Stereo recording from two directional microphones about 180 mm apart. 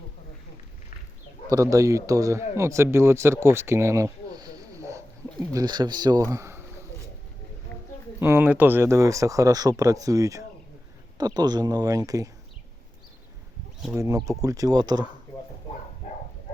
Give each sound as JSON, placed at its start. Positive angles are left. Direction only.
{"t": 1.5, "sound": "speech", "side_deg": -20}
{"t": 7.7, "sound": "a sound", "side_deg": 10}
{"t": 8.2, "sound": "speech", "side_deg": -10}
{"t": 13.9, "sound": "speech", "side_deg": -15}